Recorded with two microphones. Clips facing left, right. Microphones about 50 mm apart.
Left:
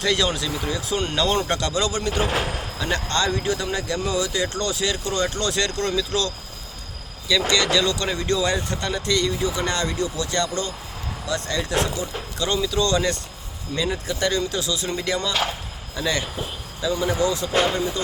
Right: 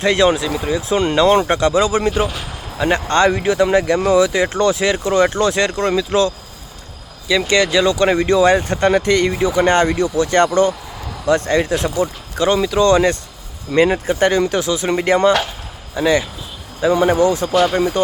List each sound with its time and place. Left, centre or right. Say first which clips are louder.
0.0 s speech: right 8 dB; right
2.2 s speech: even; left
2.7 s speech: right 10 dB; right
7.5 s speech: right 8 dB; right
13.7 s speech: right 11 dB; right
14.2 s speech: right 7 dB; right
16.0 s speech: right 9 dB; right
16.8 s speech: right 9 dB; right
17.5 s speech: right 6 dB; left
17.7 s speech: right 8 dB; right